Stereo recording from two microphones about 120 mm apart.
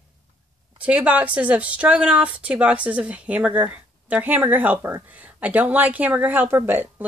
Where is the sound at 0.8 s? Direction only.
10° right (ahead or behind).